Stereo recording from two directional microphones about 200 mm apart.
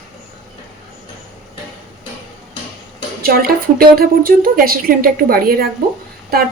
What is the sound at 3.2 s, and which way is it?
A woman's voice, 50° right (ahead or behind).